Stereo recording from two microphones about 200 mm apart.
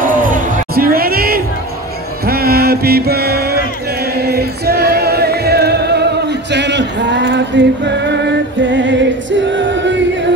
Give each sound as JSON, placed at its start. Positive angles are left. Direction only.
{"t": 0.0, "sound": "music", "side_deg": -45}
{"t": 2.2, "sound": "chant", "side_deg": -50}
{"t": 8.7, "sound": "music", "side_deg": -65}